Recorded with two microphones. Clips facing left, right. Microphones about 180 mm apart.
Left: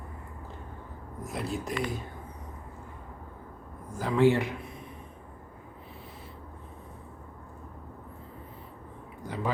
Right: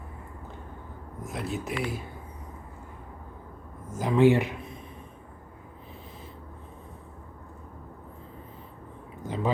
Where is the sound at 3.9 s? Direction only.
20° right (ahead or behind).